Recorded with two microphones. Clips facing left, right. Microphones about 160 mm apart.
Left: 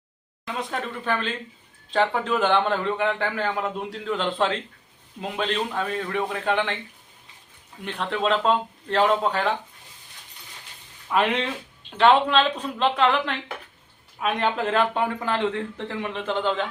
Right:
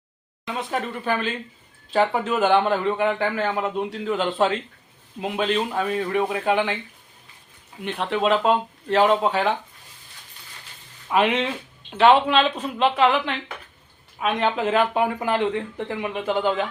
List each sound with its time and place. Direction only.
0.4 s a man's voice: centre (ahead or behind)
7.8 s a man's voice: 5° right (ahead or behind)
11.1 s a man's voice: centre (ahead or behind)